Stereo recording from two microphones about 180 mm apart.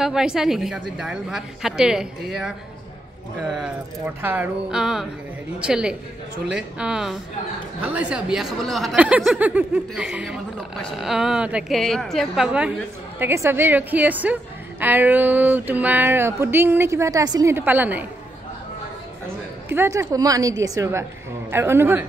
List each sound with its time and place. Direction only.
0.0 s a woman's voice: 5° right (ahead or behind)
19.2 s a woman's voice: 10° right (ahead or behind)